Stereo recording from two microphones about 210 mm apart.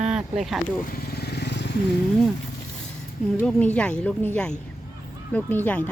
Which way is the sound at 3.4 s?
5° left (ahead or behind).